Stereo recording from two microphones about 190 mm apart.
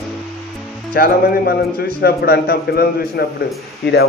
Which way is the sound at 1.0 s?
50° left (ahead or behind).